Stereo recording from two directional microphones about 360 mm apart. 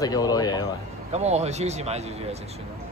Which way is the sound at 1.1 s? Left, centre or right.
Centre.